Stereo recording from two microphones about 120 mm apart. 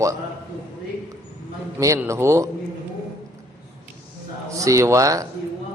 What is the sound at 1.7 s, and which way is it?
Speech, 25° right (ahead or behind).